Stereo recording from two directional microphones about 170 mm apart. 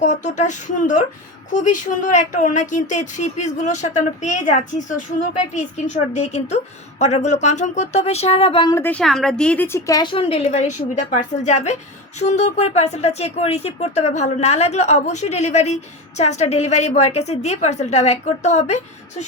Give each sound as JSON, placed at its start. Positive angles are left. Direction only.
{"t": 0.0, "sound": "speech", "side_deg": 45}
{"t": 8.7, "sound": "speech", "side_deg": 10}